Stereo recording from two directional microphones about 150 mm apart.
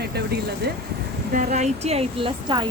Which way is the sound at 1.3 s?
50° right (ahead or behind).